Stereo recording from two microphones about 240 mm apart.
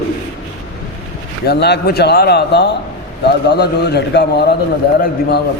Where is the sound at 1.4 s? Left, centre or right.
Left.